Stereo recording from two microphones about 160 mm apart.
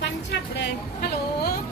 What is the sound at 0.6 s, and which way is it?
Speech, 80° left.